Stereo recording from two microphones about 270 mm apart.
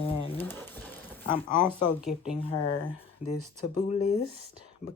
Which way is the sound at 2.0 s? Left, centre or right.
Centre.